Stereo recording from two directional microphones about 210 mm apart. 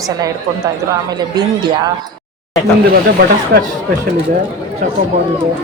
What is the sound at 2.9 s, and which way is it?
Speech, 50° right (ahead or behind).